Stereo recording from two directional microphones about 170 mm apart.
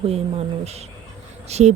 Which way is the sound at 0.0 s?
35° right (ahead or behind).